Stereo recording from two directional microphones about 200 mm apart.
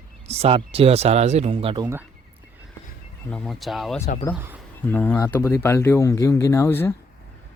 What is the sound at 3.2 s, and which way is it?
Speech, 5° left (ahead or behind).